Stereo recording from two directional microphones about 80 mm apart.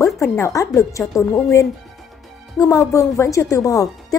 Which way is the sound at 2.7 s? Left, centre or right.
Left.